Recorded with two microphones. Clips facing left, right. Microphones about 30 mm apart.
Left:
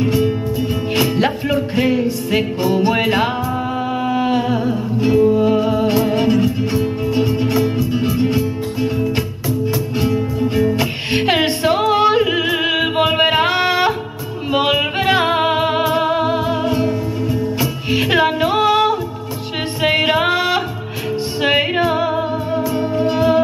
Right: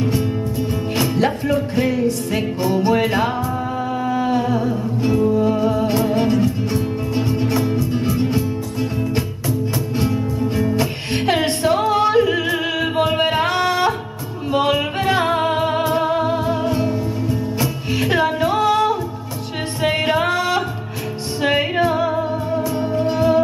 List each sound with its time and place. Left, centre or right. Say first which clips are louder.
0.2 s music: left 4 dB; centre
4.0 s music: left 1 dB; left
11.9 s yodeling: left 2 dB; left
13.0 s music: left 3 dB; centre
16.7 s music: left 2 dB; centre
17.8 s music: left 4 dB; left
22.6 s music: left 3 dB; centre